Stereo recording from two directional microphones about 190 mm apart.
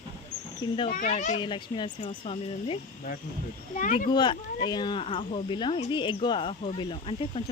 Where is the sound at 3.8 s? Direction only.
45° left (ahead or behind).